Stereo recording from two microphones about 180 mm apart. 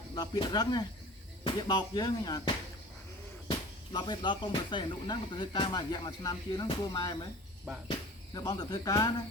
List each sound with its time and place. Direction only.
0.1 s speech: 25° left (ahead or behind)
3.9 s speech: 25° left (ahead or behind)